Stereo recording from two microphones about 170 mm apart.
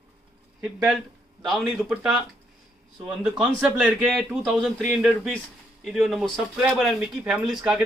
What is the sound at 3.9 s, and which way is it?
Speech, centre (ahead or behind).